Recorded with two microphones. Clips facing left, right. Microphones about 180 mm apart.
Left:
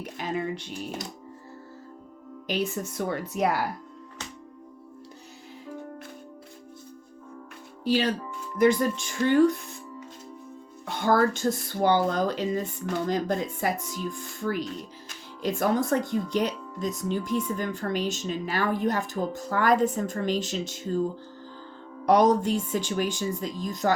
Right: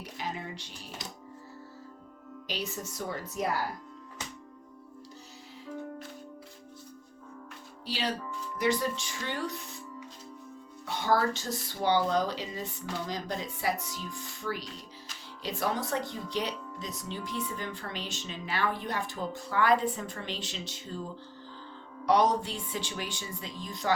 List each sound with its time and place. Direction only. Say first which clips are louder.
0.0 s speech: left 8 dB; 55° left (ahead or behind)
2.5 s a woman's voice: left 8 dB; 50° left (ahead or behind)
7.9 s speech: left 9 dB; 50° left (ahead or behind)
11.0 s speech: left 6 dB; 50° left (ahead or behind)
22.0 s speech: left 5 dB; 45° left (ahead or behind)